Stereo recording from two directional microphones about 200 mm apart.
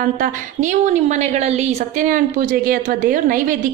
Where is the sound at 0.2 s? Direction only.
40° right (ahead or behind).